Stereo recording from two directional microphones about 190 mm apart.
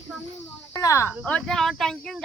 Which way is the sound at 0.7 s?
15° left (ahead or behind).